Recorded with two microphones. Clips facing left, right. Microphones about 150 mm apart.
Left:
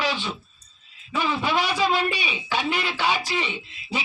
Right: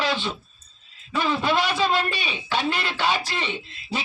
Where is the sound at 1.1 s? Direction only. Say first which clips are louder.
Right 2 dB; 10° left (ahead or behind).